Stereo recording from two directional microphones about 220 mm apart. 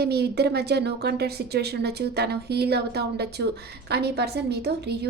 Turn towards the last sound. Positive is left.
turn(degrees=-50)  # may be behind; listen again after turning